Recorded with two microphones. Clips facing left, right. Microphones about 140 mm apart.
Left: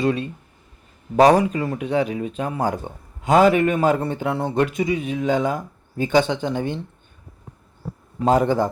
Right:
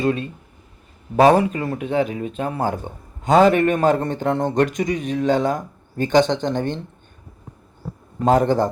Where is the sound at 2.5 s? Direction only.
15° left (ahead or behind).